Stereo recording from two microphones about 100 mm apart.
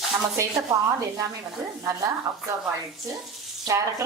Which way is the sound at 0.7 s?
35° right (ahead or behind).